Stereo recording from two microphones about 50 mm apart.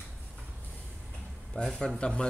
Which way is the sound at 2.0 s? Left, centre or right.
Left.